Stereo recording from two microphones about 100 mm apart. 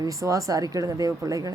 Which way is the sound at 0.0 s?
35° right (ahead or behind).